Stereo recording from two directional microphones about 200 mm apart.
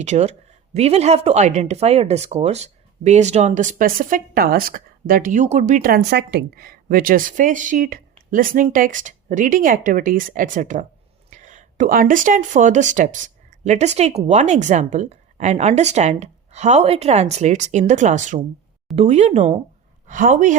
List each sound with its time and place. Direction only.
0.0 s speech: 35° right (ahead or behind)